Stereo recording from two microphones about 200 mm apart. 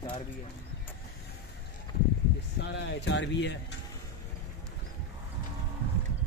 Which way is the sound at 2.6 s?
60° left (ahead or behind).